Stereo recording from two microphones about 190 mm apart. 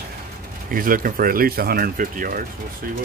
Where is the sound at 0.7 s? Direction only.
45° right (ahead or behind).